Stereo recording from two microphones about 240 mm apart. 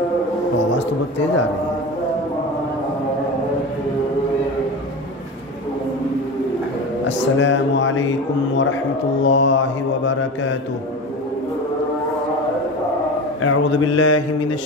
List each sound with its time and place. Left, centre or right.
7.1 s mantra: left
9.2 s mantra: left
13.4 s mantra: left